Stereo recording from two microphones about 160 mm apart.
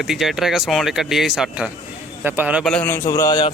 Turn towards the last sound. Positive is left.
turn(degrees=25)  # may be behind; listen again after turning